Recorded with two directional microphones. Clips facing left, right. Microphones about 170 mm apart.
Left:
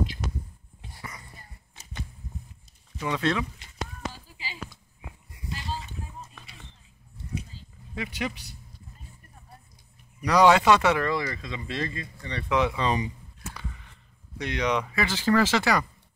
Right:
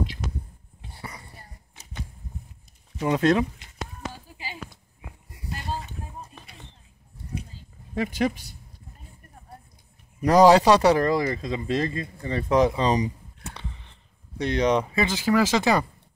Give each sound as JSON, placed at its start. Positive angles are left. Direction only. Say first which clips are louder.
{"t": 0.9, "sound": "whispering", "louder": "right 2 dB", "side_deg": -30}
{"t": 3.0, "sound": "speech", "louder": "right 6 dB", "side_deg": -40}
{"t": 4.1, "sound": "a sound", "louder": "right 3 dB", "side_deg": -50}
{"t": 7.9, "sound": "speech", "louder": "right 7 dB", "side_deg": -40}
{"t": 10.2, "sound": "speech", "louder": "right 4 dB", "side_deg": -40}
{"t": 15.1, "sound": "speech", "louder": "even", "side_deg": -10}